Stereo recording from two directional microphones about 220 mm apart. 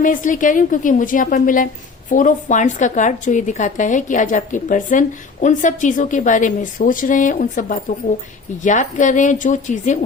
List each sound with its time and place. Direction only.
0.0 s a woman's voice: 35° left (ahead or behind)